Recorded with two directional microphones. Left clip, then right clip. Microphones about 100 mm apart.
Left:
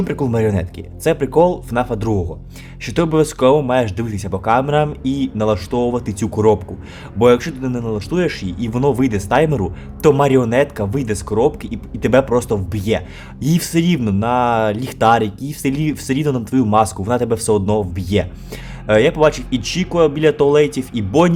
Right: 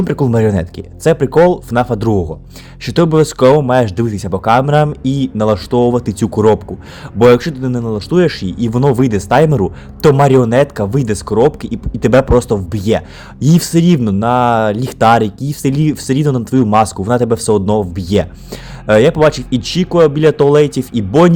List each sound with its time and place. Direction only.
0.0 s speech: 40° right (ahead or behind)